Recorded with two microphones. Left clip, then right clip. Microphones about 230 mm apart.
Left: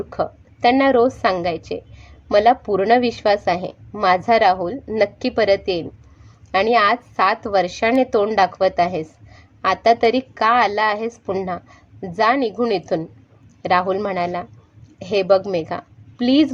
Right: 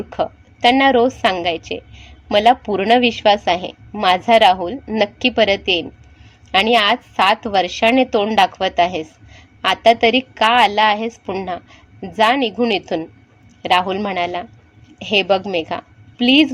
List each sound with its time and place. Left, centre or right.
0.1 s a woman's voice: right